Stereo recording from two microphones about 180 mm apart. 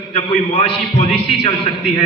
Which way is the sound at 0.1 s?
30° left (ahead or behind).